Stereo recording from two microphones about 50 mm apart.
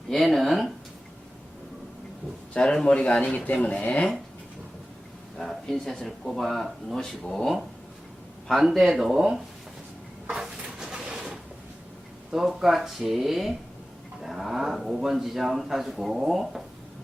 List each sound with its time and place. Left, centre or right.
0.1 s a sound: centre
2.8 s speech: centre
5.6 s speech: centre
10.2 s dishes: centre
12.3 s speech: centre